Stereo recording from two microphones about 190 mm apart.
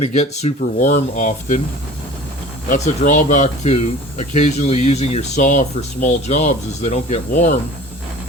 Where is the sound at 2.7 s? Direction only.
40° left (ahead or behind).